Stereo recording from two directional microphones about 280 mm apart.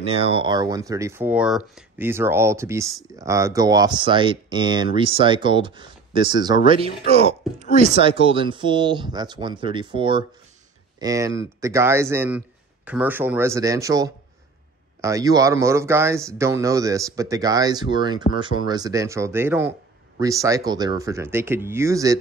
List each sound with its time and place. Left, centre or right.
0.0 s speech: right